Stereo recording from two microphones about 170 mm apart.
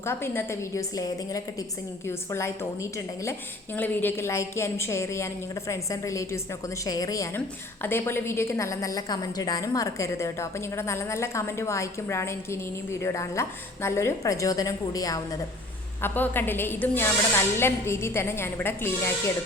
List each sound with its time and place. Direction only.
0.0 s a woman's voice: 15° left (ahead or behind)